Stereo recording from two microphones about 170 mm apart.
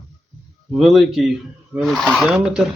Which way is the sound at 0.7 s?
Centre (ahead or behind).